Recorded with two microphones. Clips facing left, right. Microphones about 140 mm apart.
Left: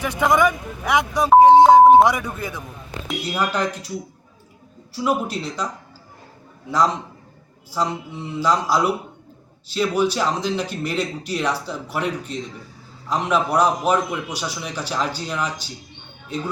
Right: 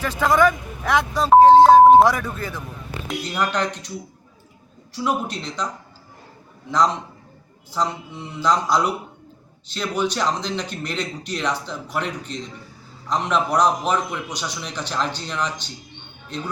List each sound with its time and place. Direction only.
0.0 s speech: 15° left (ahead or behind)
4.9 s speech: 5° left (ahead or behind)
6.7 s speech: 10° left (ahead or behind)